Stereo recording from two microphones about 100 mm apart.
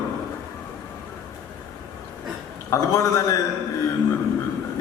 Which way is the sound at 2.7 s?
35° left (ahead or behind).